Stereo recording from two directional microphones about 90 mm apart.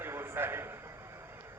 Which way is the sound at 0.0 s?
25° right (ahead or behind).